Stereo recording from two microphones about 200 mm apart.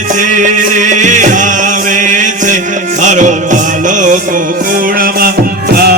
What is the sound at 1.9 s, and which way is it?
Chant, 40° right (ahead or behind).